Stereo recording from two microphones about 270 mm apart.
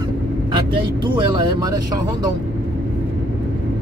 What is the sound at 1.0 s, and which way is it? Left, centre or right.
Speech, centre.